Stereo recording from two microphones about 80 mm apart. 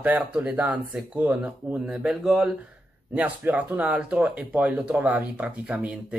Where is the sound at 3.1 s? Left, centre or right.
Centre.